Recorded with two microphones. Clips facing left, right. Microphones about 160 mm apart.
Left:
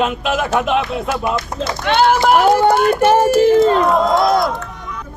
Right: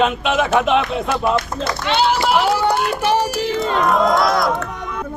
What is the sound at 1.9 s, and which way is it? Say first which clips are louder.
Speech: left 4 dB; 55° left (ahead or behind).